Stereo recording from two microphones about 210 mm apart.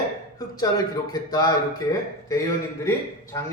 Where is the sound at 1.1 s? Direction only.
20° left (ahead or behind).